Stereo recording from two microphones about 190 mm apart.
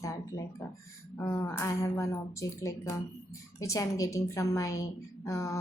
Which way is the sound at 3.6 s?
15° left (ahead or behind).